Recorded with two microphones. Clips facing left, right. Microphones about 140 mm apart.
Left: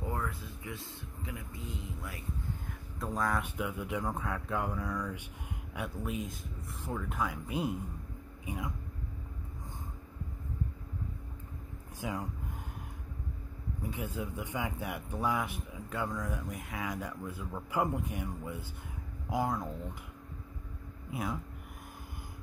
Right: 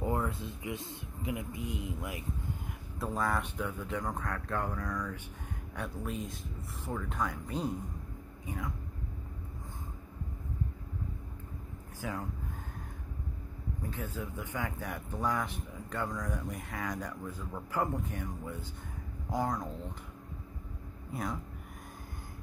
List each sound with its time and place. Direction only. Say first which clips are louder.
0.0 s a man's voice: right 4 dB; 20° right (ahead or behind)
3.0 s speech: even; centre (ahead or behind)
12.0 s speech: left 1 dB; 15° left (ahead or behind)
13.8 s speech: left 2 dB; 15° left (ahead or behind)
21.1 s speech: left 1 dB; 5° left (ahead or behind)